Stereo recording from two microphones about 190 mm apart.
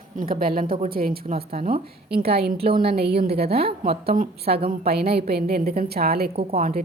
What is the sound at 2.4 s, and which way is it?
Speech, 55° right (ahead or behind).